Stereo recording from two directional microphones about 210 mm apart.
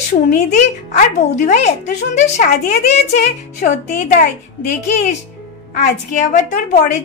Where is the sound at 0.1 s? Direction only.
35° left (ahead or behind).